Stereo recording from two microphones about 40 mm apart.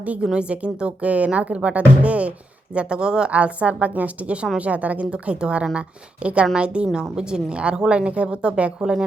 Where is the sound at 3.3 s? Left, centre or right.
Right.